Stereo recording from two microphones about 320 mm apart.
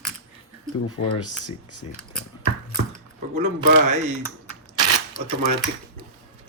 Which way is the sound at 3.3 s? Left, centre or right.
Right.